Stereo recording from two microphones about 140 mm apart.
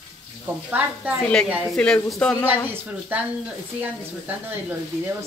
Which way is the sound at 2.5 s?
15° right (ahead or behind).